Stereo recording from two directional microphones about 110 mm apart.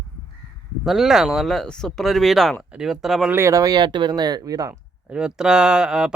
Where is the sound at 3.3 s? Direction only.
25° right (ahead or behind).